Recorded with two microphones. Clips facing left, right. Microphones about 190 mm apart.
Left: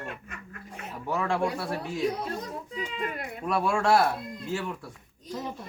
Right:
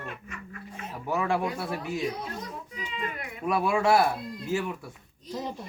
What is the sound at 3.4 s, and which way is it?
Speech, 5° right (ahead or behind).